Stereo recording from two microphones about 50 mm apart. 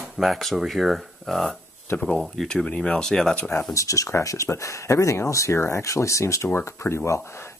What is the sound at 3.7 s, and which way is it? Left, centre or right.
Speech, left.